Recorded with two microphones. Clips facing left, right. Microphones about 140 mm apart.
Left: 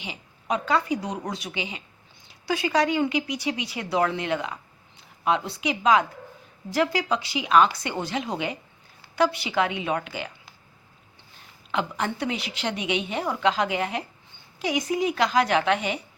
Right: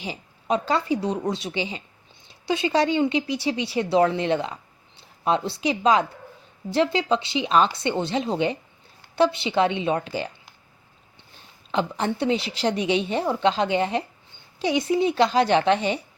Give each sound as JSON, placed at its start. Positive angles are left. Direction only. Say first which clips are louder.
{"t": 0.0, "sound": "a woman's voice", "louder": "right 5 dB", "side_deg": -35}
{"t": 11.7, "sound": "a woman's voice", "louder": "right 3 dB", "side_deg": -30}